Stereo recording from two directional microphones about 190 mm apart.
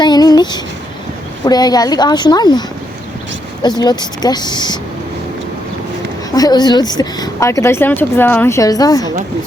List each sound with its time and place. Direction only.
0.0 s a sound: 20° left (ahead or behind)
1.5 s speech: 20° left (ahead or behind)
6.3 s speech: 20° left (ahead or behind)